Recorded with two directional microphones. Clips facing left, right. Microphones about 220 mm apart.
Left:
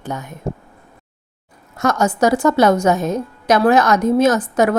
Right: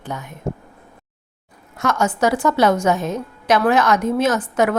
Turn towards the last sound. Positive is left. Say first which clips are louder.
# left 3 dB
turn(degrees=40)  # may be behind; listen again after turning